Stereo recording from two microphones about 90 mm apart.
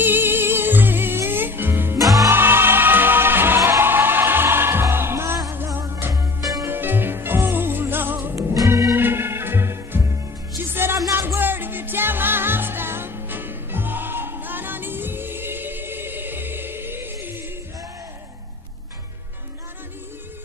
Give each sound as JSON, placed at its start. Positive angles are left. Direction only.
{"t": 0.0, "sound": "music", "side_deg": -25}
{"t": 8.6, "sound": "music", "side_deg": -40}
{"t": 8.9, "sound": "music", "side_deg": -25}